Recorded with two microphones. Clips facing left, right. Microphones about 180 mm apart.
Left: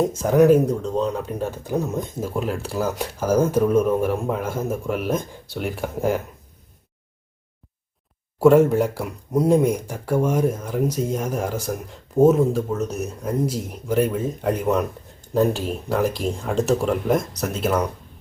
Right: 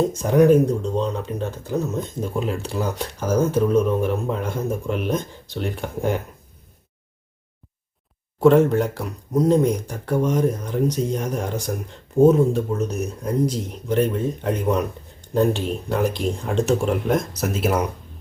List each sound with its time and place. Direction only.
0.0 s speech: 5° left (ahead or behind)
8.4 s speech: 5° left (ahead or behind)